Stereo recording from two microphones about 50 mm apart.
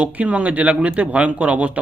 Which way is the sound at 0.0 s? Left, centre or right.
Right.